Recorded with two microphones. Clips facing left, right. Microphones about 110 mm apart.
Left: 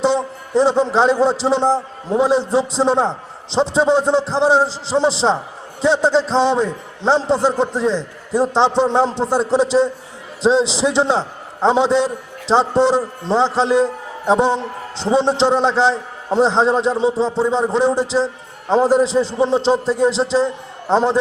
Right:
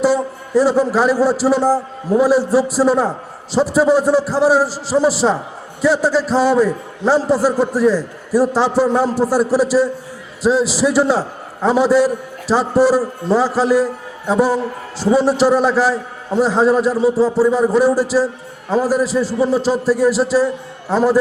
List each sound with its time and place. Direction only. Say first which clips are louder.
0.0 s a man's voice: right 2 dB; 25° left (ahead or behind)